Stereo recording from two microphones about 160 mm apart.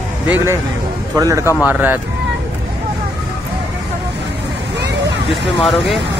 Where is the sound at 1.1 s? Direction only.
20° right (ahead or behind).